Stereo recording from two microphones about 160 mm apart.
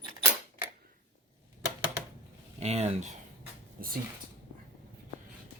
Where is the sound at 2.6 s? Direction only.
40° right (ahead or behind).